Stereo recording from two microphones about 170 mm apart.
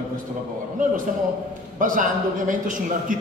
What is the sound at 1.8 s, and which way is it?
A man's voice, 50° right (ahead or behind).